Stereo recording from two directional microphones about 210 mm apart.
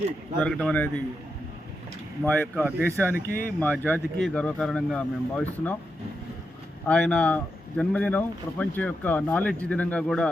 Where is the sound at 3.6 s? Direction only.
10° left (ahead or behind).